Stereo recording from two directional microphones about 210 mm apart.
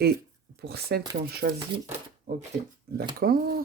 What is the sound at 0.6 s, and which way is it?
Speech, 50° right (ahead or behind).